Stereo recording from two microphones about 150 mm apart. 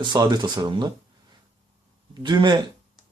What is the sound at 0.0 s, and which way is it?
Speech, 30° right (ahead or behind).